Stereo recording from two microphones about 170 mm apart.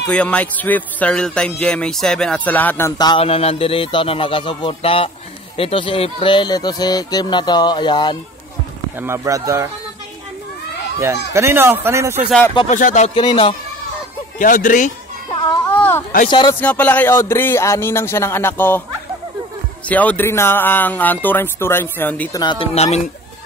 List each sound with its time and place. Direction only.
0.1 s a man's voice: 10° left (ahead or behind)
3.0 s speech: 30° left (ahead or behind)
9.0 s speech: 15° right (ahead or behind)
11.0 s speech: 15° right (ahead or behind)
12.6 s speech: 45° left (ahead or behind)
13.1 s speech: 30° left (ahead or behind)
14.4 s speech: 50° left (ahead or behind)
15.7 s a sound: 10° left (ahead or behind)
16.3 s speech: 25° left (ahead or behind)
16.5 s a man's voice: 10° left (ahead or behind)
19.9 s a man's voice: 10° left (ahead or behind)
22.3 s speech: 25° left (ahead or behind)